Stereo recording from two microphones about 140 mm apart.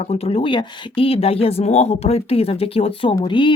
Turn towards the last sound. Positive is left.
turn(degrees=35)  # may be behind; listen again after turning